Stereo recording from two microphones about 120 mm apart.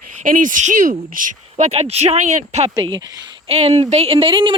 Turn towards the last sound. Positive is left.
turn(degrees=-45)  # may be behind; listen again after turning